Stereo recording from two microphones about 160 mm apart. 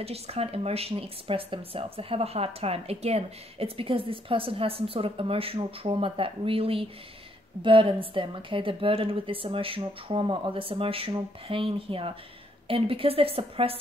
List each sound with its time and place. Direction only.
0.0 s speech: 40° right (ahead or behind)